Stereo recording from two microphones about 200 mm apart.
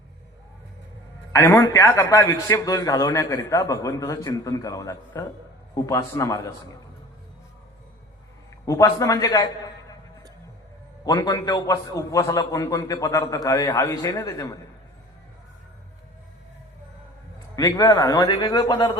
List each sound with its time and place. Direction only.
1.3 s a man's voice: 15° left (ahead or behind)
8.6 s a man's voice: 15° left (ahead or behind)
11.0 s a man's voice: 15° left (ahead or behind)
17.5 s a man's voice: 15° left (ahead or behind)